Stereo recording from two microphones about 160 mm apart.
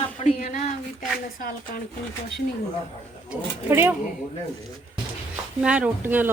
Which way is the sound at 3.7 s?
15° right (ahead or behind).